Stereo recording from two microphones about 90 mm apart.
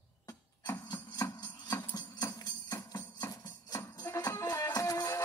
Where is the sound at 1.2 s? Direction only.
30° left (ahead or behind).